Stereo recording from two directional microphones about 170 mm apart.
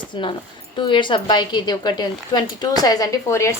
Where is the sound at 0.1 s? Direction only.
30° left (ahead or behind).